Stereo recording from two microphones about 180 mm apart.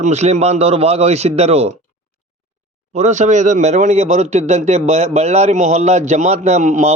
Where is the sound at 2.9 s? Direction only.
40° right (ahead or behind).